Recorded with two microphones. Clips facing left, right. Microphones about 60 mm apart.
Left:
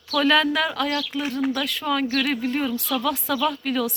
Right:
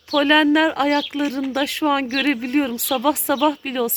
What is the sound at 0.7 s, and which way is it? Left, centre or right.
Speech, right.